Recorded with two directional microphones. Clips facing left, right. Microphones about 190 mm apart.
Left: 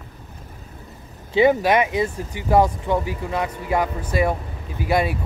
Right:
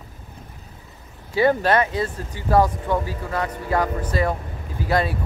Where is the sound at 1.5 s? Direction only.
15° left (ahead or behind).